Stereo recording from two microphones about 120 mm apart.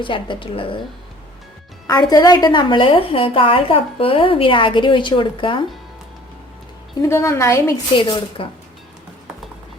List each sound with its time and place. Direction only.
0.0 s a woman's voice: 45° left (ahead or behind)
1.9 s a woman's voice: 35° left (ahead or behind)
7.0 s a woman's voice: 25° left (ahead or behind)
7.9 s a woman's voice: 45° left (ahead or behind)